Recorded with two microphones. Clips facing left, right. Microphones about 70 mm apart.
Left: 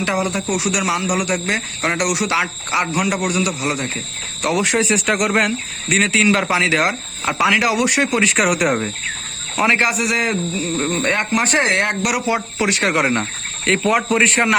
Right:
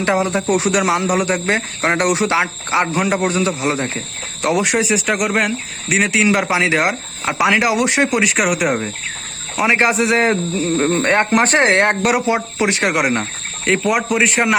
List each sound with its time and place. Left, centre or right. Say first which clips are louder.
0.0 s speech: right 3 dB; right
0.4 s speech: right 4 dB; right
4.8 s speech: even; centre; by 8.2 s right
8.2 s speech: even; centre
9.7 s speech: right 4 dB; right
11.3 s speech: right 4 dB; right; by 14.5 s centre